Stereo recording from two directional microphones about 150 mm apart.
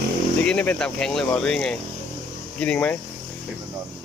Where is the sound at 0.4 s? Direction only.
10° left (ahead or behind).